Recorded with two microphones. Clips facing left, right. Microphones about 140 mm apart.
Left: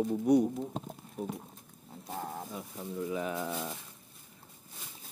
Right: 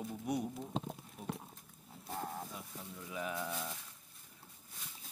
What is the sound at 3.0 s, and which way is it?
Speech, 40° left (ahead or behind).